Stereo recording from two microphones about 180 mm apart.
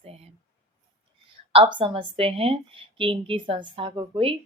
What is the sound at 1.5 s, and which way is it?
A woman's voice, 30° right (ahead or behind).